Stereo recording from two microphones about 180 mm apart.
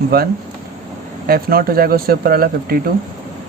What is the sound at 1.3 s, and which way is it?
Speech, 55° right (ahead or behind).